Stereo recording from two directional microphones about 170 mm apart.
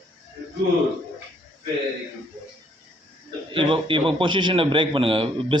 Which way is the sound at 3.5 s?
30° right (ahead or behind).